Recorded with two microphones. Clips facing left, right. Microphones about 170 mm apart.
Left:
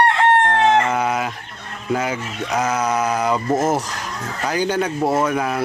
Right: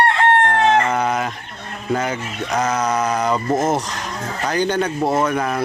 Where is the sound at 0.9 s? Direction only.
5° left (ahead or behind).